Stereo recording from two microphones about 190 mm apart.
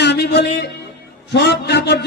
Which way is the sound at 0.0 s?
60° left (ahead or behind).